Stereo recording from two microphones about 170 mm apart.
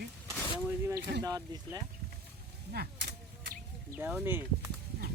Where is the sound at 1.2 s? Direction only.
20° right (ahead or behind).